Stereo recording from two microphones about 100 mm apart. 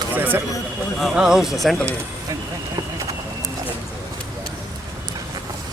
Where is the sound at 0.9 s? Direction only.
5° right (ahead or behind).